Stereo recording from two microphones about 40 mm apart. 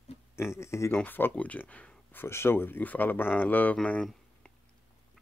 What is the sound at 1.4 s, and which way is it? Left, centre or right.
Speech, left.